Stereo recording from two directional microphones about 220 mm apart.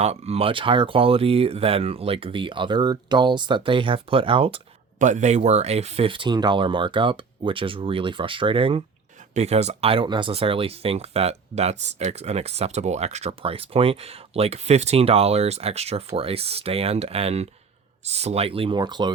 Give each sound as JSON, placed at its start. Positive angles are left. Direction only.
{"t": 0.0, "sound": "speech", "side_deg": -30}